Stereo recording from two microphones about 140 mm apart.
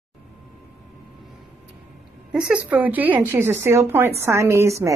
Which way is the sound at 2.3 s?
10° right (ahead or behind).